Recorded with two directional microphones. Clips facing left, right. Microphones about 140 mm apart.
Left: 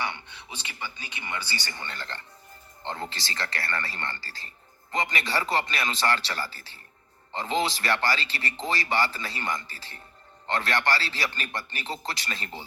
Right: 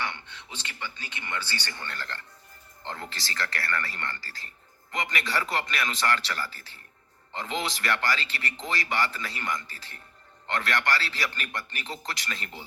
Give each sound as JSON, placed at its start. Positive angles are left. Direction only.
{"t": 0.0, "sound": "a man's voice", "side_deg": 10}